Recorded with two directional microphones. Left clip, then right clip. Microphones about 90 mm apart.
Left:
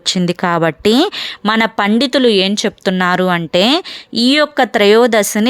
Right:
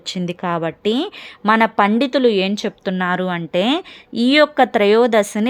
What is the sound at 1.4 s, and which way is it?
Speech, 30° left (ahead or behind).